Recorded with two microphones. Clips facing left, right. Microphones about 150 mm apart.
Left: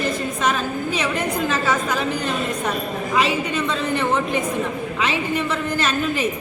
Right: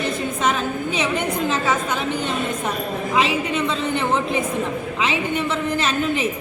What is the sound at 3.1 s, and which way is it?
Speech, 25° right (ahead or behind).